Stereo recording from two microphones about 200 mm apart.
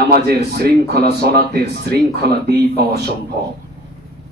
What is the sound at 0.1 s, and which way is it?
A man's voice, 50° right (ahead or behind).